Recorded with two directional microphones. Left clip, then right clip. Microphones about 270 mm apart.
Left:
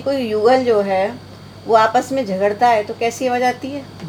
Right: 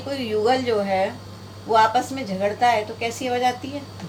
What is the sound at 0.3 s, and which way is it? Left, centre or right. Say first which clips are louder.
A woman's voice: left 6 dB; left.